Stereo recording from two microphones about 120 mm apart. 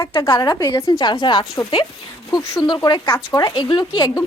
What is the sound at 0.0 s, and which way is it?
Speech, 45° left (ahead or behind).